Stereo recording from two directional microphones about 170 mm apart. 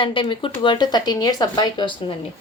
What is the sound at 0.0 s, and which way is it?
A woman's voice, 30° left (ahead or behind).